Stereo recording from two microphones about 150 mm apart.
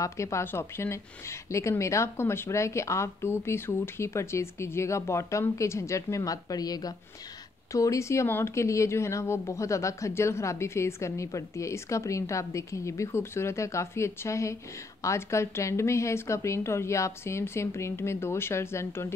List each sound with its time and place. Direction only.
0.0 s a woman's voice: 20° left (ahead or behind)